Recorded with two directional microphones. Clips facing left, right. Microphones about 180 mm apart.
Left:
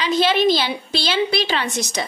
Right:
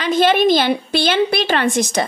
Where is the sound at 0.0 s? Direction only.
50° right (ahead or behind).